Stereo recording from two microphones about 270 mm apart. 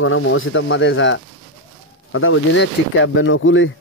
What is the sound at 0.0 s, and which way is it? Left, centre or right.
Speech, left.